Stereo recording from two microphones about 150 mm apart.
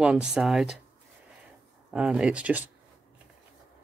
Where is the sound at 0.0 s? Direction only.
5° right (ahead or behind).